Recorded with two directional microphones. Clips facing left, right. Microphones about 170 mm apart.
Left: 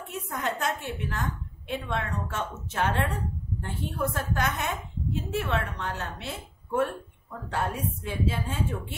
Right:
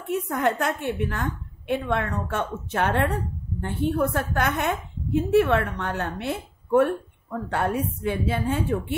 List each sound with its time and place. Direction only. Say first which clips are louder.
0.3 s a woman's voice: right 4 dB; 60° right (ahead or behind)